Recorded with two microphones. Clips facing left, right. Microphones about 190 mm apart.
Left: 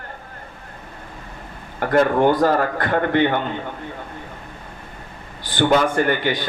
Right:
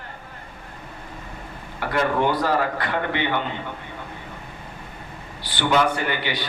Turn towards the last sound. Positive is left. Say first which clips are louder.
# left 7 dB
turn(degrees=45)  # may be behind; listen again after turning